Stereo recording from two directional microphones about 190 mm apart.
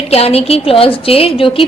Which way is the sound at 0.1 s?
30° left (ahead or behind).